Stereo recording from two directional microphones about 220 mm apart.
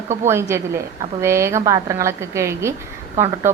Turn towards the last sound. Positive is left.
turn(degrees=-10)  # may be behind; listen again after turning